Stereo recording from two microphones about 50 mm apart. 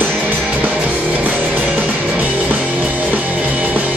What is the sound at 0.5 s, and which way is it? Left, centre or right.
Music, right.